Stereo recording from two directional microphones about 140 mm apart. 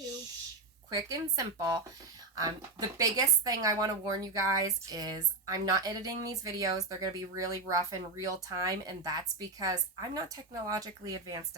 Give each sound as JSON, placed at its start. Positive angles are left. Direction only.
{"t": 0.9, "sound": "a woman's voice", "side_deg": -25}